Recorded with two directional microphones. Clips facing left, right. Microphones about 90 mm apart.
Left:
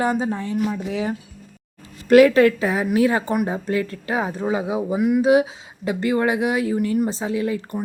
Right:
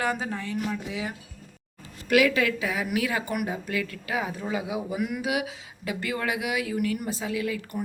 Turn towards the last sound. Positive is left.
turn(degrees=25)  # may be behind; listen again after turning